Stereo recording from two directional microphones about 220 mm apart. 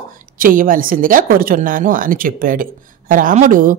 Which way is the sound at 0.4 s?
40° right (ahead or behind).